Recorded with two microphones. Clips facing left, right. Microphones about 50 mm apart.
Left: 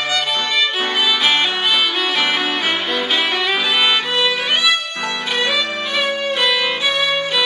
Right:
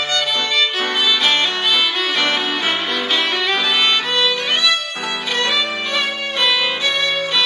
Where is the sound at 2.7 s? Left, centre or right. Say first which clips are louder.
Left 1 dB; centre.